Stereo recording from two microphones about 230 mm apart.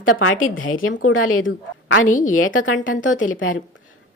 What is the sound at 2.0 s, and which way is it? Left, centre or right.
Speech, left.